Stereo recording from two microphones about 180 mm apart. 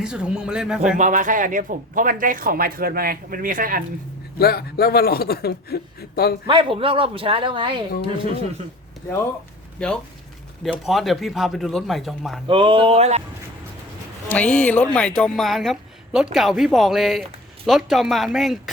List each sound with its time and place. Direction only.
0.0 s a woman's voice: 5° right (ahead or behind)
0.9 s speech: 45° right (ahead or behind)
4.4 s speech: 60° left (ahead or behind)
6.5 s a man's voice: 25° right (ahead or behind)
9.8 s a woman's voice: 5° left (ahead or behind)
12.5 s speech: 30° right (ahead or behind)
14.3 s a woman's voice: 5° left (ahead or behind)